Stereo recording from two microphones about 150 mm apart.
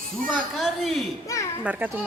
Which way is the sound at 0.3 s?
Centre (ahead or behind).